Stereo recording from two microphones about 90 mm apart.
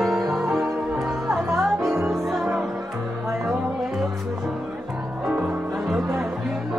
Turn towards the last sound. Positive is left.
turn(degrees=-5)  # may be behind; listen again after turning